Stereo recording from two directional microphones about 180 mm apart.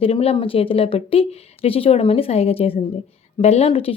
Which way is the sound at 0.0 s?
35° left (ahead or behind).